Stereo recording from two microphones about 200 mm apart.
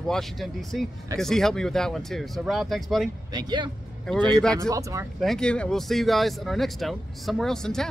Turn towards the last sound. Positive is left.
turn(degrees=0)  # may be behind; listen again after turning